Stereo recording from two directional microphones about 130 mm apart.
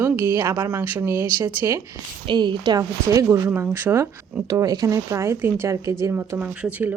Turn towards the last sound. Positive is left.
turn(degrees=-15)  # may be behind; listen again after turning